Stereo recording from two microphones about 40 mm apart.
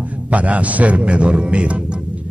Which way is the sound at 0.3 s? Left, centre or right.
Right.